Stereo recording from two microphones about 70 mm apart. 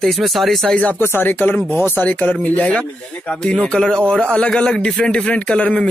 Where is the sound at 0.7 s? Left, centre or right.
Left.